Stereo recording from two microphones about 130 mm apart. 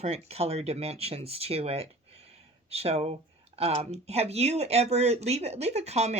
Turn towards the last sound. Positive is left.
turn(degrees=-55)  # may be behind; listen again after turning